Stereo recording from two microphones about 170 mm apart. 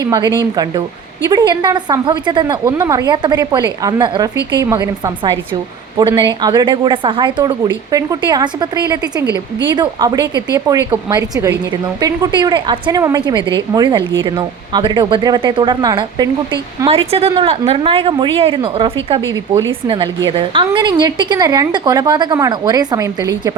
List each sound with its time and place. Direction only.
0.0 s a woman's voice: 25° right (ahead or behind)
9.2 s speech: 20° left (ahead or behind)
9.6 s a woman's voice: 25° right (ahead or behind)
16.9 s a woman's voice: 35° right (ahead or behind); by 23.6 s 20° right (ahead or behind)